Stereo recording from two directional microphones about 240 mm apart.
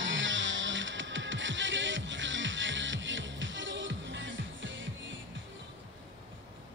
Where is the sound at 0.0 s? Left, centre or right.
Right.